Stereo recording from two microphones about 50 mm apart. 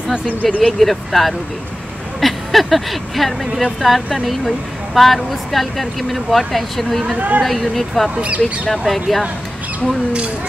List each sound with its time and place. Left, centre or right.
0.3 s speech: left
0.7 s speech: centre
7.2 s speech: right
7.4 s speech: centre